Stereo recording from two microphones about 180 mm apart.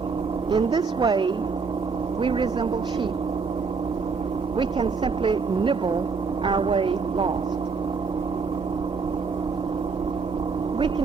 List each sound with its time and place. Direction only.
0.5 s speech: 25° right (ahead or behind)
4.5 s speech: 25° right (ahead or behind)